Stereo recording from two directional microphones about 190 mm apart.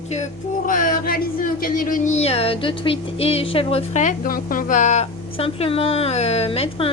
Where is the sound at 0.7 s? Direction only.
45° left (ahead or behind).